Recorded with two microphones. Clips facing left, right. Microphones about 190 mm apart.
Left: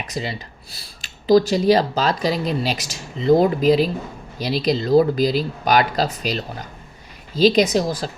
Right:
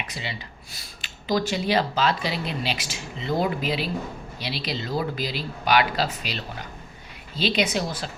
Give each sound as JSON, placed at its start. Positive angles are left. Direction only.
{"t": 0.1, "sound": "speech", "side_deg": 40}